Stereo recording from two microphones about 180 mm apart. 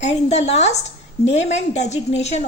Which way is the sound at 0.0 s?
35° left (ahead or behind).